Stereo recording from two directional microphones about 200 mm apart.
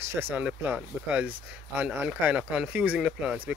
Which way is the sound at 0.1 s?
10° right (ahead or behind).